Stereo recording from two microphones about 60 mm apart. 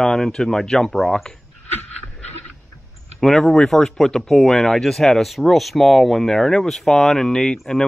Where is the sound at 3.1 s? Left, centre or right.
Centre.